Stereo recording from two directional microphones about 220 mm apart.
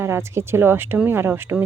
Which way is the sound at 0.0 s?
10° right (ahead or behind).